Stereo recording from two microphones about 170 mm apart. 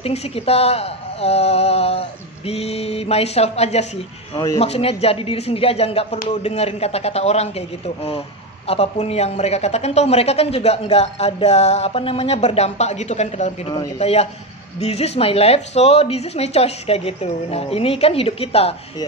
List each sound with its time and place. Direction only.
0.0 s a man's voice: 35° left (ahead or behind)